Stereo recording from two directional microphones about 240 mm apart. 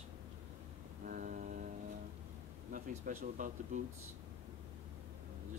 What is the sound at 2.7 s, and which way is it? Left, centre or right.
Speech, right.